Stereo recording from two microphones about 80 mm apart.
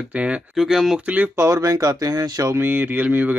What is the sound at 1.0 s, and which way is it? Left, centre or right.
Speech, centre.